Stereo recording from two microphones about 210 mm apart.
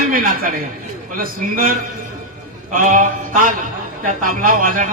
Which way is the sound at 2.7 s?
40° right (ahead or behind).